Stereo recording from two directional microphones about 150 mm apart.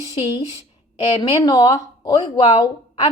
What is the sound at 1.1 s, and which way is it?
A woman's voice, 35° left (ahead or behind).